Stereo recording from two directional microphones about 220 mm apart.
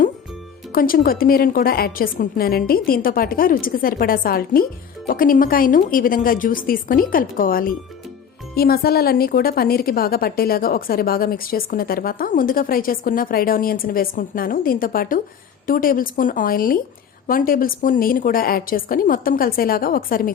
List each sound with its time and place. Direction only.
0.7 s a woman's voice: 40° left (ahead or behind)